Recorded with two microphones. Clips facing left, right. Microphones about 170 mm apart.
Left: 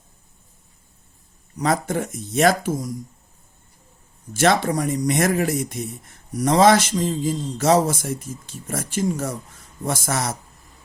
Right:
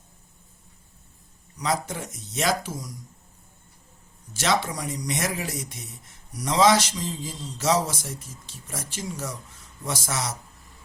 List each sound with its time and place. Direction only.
1.5 s speech: 55° left (ahead or behind)
4.4 s speech: 55° left (ahead or behind)